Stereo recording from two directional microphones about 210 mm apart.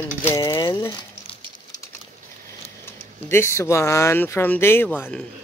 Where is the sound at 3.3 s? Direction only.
10° left (ahead or behind).